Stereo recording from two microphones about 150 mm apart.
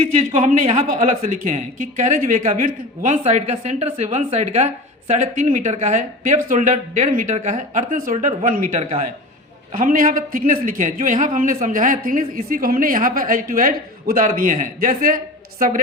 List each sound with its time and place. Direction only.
0.2 s a man's voice: 45° right (ahead or behind)
8.8 s a woman's voice: 45° right (ahead or behind)
9.7 s a man's voice: 65° right (ahead or behind)